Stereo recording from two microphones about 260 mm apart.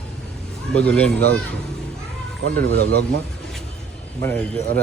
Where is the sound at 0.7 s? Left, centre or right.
Centre.